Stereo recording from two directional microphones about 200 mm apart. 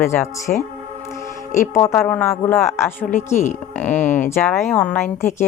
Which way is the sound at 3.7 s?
10° left (ahead or behind).